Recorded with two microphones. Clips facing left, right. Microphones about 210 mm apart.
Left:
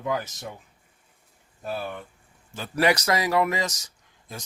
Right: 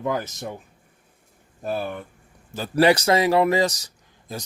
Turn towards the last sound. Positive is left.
turn(degrees=-30)  # may be behind; listen again after turning